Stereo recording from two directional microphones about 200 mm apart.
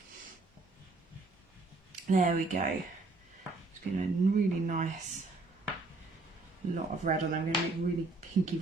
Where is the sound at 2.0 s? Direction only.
40° right (ahead or behind).